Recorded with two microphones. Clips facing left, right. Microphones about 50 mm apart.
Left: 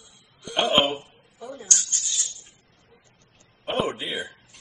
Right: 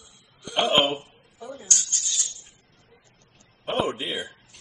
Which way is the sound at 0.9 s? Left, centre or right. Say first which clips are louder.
Right 1 dB; centre.